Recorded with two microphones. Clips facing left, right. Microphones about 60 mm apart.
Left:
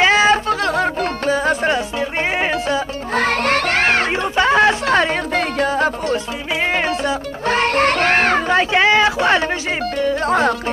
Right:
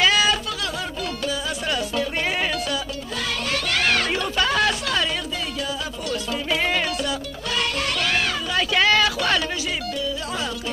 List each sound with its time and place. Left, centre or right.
0.0 s music: left
2.0 s music: left
3.2 s music: left
6.5 s music: left
8.7 s chatter: left
9.9 s music: left